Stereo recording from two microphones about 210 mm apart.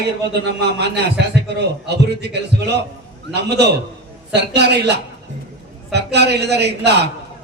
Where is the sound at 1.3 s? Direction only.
55° right (ahead or behind).